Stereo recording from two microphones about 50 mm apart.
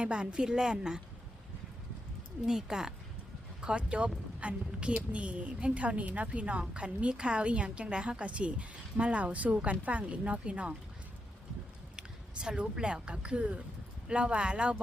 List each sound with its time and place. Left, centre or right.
0.0 s a woman's voice: right
2.5 s a woman's voice: centre
3.6 s a woman's voice: right
11.9 s a woman's voice: centre